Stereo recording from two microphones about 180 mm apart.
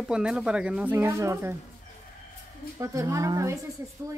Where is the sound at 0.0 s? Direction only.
5° right (ahead or behind).